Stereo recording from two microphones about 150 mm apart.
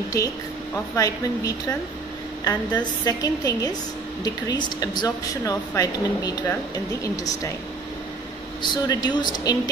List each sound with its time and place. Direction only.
0.9 s speech: 20° left (ahead or behind)
8.6 s speech: 30° left (ahead or behind)